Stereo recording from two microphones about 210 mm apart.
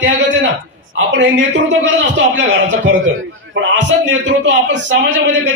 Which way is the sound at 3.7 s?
60° right (ahead or behind).